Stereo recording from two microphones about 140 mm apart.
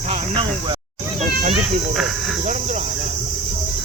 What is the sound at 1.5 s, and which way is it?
Speech, centre (ahead or behind).